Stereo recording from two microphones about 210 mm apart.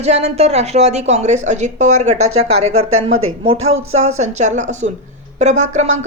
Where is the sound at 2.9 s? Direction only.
80° right.